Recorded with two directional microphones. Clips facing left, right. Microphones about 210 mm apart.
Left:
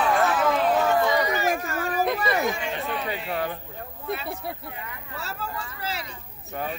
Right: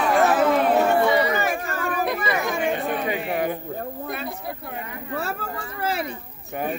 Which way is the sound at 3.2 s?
15° right (ahead or behind).